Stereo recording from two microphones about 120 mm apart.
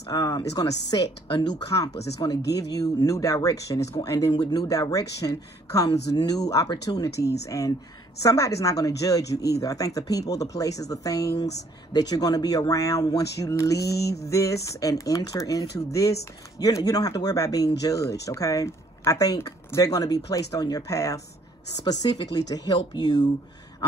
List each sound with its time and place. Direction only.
0.1 s speech: 25° left (ahead or behind)
4.3 s speech: 45° left (ahead or behind)
4.6 s speech: 30° left (ahead or behind)